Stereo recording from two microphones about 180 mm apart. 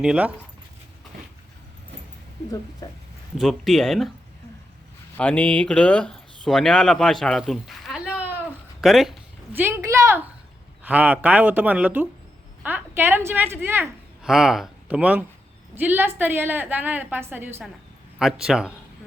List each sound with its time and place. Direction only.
0.0 s a woman's voice: 5° right (ahead or behind)
2.8 s speech: 20° left (ahead or behind)
3.3 s speech: centre (ahead or behind)
5.1 s speech: 5° left (ahead or behind)
9.5 s a woman's voice: 10° right (ahead or behind)
14.3 s a woman's voice: centre (ahead or behind)
18.2 s speech: centre (ahead or behind)